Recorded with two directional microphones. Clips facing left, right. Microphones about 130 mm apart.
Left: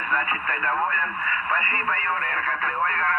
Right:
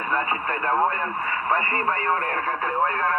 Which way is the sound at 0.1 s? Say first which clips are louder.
Right 2 dB; 35° right (ahead or behind).